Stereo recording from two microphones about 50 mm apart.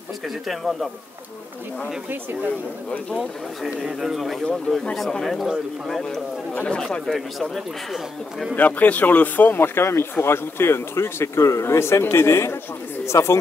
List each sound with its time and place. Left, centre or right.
0.5 s speech: centre
3.2 s speech: centre
6.0 s speech: centre
7.1 s speech: centre
8.5 s speech: left